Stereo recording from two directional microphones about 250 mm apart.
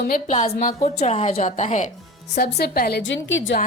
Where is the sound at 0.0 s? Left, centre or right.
Left.